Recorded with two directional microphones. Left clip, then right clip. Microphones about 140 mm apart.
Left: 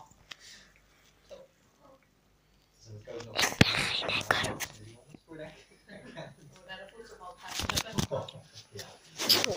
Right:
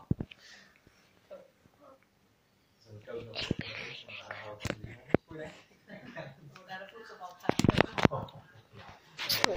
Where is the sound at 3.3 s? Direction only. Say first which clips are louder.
Left 13 dB; 75° left (ahead or behind).